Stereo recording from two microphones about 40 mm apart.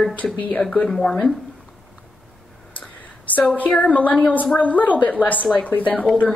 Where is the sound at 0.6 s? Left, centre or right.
Left.